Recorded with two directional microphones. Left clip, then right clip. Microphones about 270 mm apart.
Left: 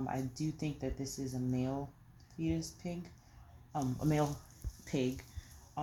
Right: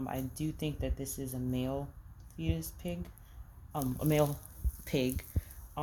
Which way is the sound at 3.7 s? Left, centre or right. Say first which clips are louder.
Right 3 dB; right.